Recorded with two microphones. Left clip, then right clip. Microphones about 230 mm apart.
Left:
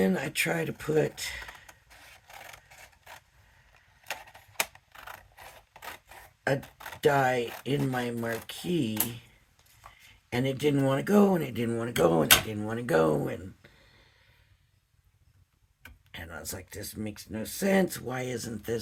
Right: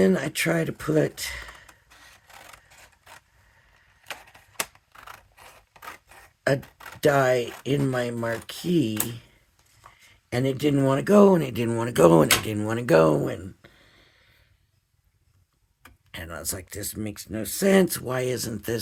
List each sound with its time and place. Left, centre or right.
0.0 s speech: right
2.8 s vehicle: centre
4.2 s a sound: centre
7.0 s speech: right
10.2 s speech: right
16.1 s speech: right